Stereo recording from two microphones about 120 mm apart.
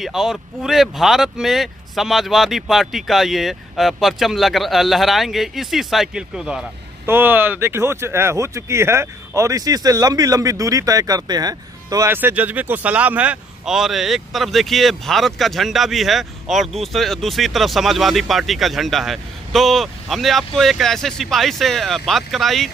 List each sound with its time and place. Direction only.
0.0 s speech: centre (ahead or behind)
7.1 s speech: 15° right (ahead or behind)
12.1 s speech: 15° right (ahead or behind); by 22.7 s centre (ahead or behind)